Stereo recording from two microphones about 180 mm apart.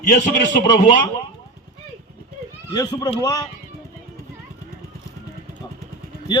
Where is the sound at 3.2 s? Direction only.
20° left (ahead or behind).